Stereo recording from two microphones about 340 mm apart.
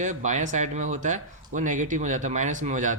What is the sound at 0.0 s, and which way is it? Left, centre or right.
A man's voice, right.